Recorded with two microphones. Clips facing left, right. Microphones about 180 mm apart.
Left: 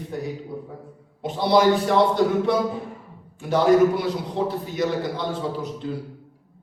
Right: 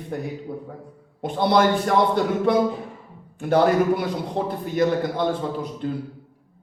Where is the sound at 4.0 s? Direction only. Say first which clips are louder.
Left 1 dB; 55° right (ahead or behind).